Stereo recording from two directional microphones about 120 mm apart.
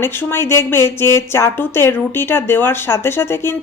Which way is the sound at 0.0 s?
20° left (ahead or behind).